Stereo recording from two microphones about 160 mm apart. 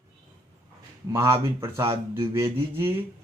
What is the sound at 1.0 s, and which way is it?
Speech, 20° right (ahead or behind).